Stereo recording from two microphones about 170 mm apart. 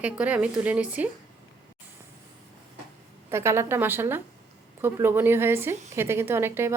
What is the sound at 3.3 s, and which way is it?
A woman's voice, 15° right (ahead or behind).